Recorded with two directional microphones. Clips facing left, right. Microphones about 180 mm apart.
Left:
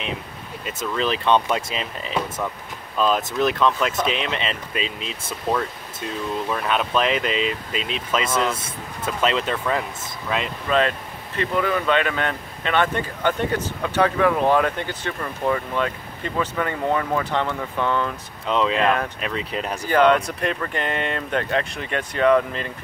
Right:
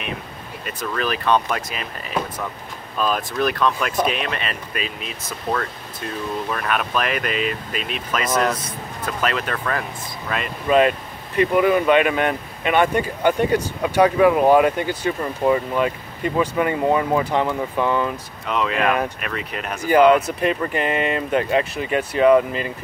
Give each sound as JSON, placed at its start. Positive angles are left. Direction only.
{"t": 0.7, "sound": "speech", "side_deg": 25}
{"t": 10.7, "sound": "speech", "side_deg": -15}
{"t": 18.4, "sound": "speech", "side_deg": 25}
{"t": 19.9, "sound": "speech", "side_deg": -5}